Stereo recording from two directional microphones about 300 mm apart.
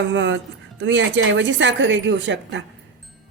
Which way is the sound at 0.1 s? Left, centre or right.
Right.